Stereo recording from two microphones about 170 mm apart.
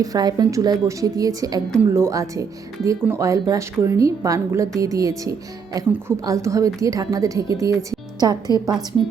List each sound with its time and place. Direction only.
0.0 s a woman's voice: 20° right (ahead or behind)